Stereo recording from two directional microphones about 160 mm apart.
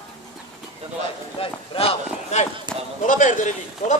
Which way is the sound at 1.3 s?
35° left (ahead or behind).